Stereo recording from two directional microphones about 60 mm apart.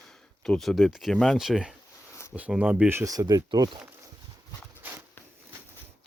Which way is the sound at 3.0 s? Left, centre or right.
Right.